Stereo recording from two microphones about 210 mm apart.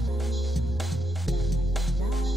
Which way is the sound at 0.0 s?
Centre (ahead or behind).